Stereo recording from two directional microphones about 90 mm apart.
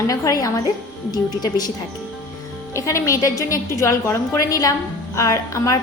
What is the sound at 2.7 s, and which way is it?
A woman's voice, 35° left (ahead or behind).